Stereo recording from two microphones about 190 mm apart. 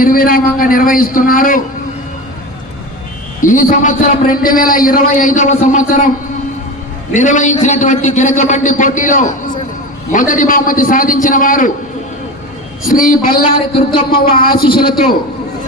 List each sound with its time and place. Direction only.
0.0 s a man's voice: 50° left (ahead or behind)
3.4 s a man's voice: 40° left (ahead or behind)
7.1 s a man's voice: 40° left (ahead or behind)
12.8 s a man's voice: 45° left (ahead or behind)